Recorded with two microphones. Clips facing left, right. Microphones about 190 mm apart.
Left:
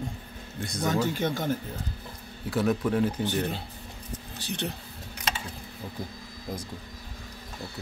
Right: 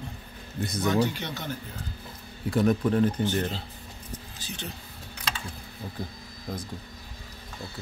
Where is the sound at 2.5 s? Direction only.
Centre (ahead or behind).